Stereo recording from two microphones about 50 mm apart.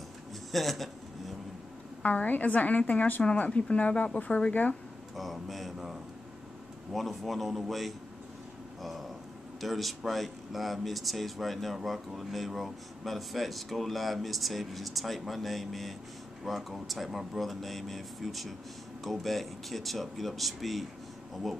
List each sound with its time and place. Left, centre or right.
0.5 s speech: centre
2.0 s a woman's voice: left
5.1 s speech: centre
6.9 s speech: centre
9.6 s speech: centre